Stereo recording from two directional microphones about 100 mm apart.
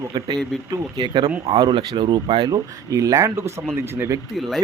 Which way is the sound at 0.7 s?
45° right (ahead or behind).